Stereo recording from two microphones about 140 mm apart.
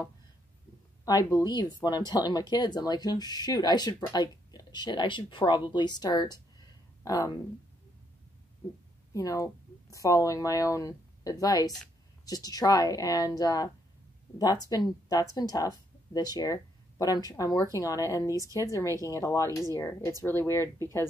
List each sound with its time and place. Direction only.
1.0 s speech: 25° left (ahead or behind)
9.1 s speech: 25° left (ahead or behind)
18.3 s speech: 25° right (ahead or behind)
18.7 s speech: 20° left (ahead or behind)